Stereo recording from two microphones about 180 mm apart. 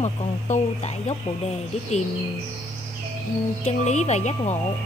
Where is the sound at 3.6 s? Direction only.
40° left (ahead or behind).